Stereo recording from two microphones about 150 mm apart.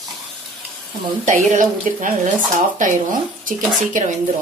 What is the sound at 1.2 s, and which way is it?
Speech, 55° right (ahead or behind).